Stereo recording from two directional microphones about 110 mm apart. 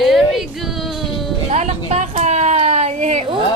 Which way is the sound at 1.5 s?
90° right.